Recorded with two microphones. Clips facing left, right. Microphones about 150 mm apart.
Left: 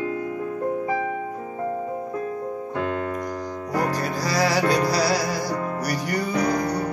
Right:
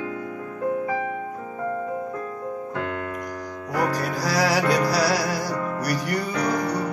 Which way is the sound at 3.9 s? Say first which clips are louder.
Even; centre (ahead or behind).